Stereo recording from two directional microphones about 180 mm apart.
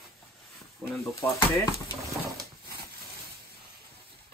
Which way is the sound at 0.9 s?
15° left (ahead or behind).